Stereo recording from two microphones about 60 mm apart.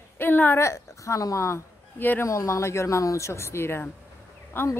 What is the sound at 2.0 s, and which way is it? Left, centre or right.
Speech, left.